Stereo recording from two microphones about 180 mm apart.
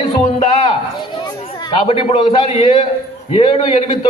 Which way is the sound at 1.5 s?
30° left (ahead or behind).